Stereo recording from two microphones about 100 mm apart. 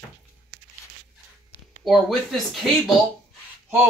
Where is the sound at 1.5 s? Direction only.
50° left (ahead or behind).